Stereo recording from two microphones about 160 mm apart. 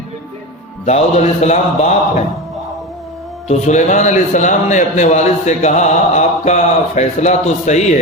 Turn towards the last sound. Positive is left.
turn(degrees=45)  # may be behind; listen again after turning